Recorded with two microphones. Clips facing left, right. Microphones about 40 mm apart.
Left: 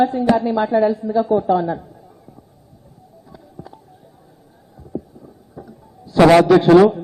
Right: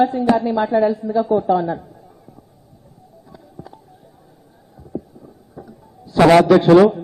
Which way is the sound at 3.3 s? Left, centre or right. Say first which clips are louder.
Even; centre.